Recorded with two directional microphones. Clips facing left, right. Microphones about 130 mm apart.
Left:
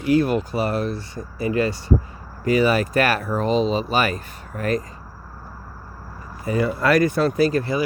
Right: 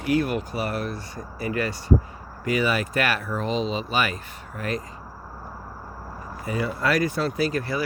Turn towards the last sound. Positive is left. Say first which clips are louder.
# left 6 dB
turn(degrees=45)  # may be behind; listen again after turning